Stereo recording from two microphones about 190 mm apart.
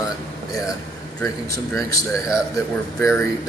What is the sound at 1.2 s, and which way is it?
Speech, 15° left (ahead or behind).